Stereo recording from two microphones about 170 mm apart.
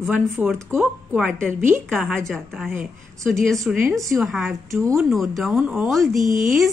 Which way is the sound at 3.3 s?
Centre (ahead or behind).